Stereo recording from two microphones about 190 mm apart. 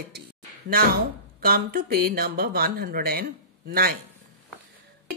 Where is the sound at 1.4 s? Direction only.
50° right (ahead or behind).